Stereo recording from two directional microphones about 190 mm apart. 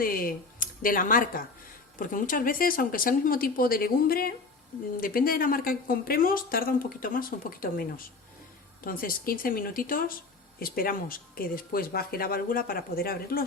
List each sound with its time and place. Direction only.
0.0 s speech: 50° left (ahead or behind)